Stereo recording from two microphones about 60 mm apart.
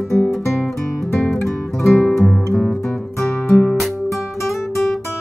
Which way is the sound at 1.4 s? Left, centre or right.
Centre.